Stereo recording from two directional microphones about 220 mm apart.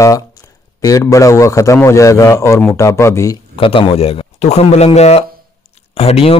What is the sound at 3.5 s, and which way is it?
Speech, 25° left (ahead or behind).